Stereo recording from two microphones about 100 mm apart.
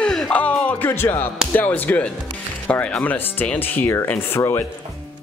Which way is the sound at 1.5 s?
15° left (ahead or behind).